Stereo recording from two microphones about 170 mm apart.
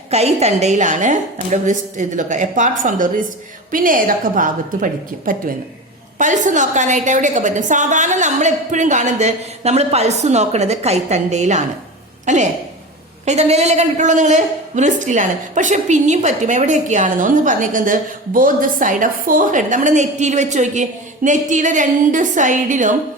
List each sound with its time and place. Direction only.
0.1 s a woman's voice: 40° right (ahead or behind)